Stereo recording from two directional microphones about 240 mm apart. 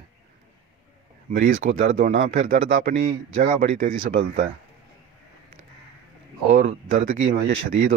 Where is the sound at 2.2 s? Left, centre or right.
Right.